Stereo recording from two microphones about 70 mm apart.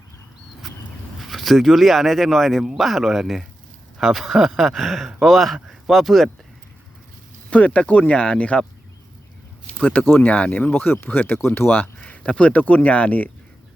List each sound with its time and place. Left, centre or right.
1.2 s speech: centre
7.5 s speech: centre
9.6 s speech: centre